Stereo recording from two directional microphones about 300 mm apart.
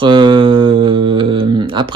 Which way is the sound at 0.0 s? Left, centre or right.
Centre.